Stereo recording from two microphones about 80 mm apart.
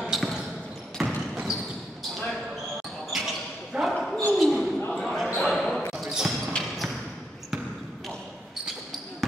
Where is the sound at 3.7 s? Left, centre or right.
Centre.